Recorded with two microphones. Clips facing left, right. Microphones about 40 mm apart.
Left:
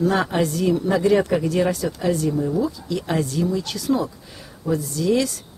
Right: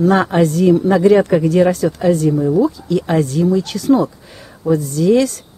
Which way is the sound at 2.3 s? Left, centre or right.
Centre.